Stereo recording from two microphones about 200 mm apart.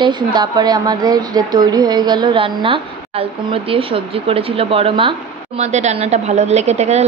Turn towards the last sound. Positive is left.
turn(degrees=-35)  # may be behind; listen again after turning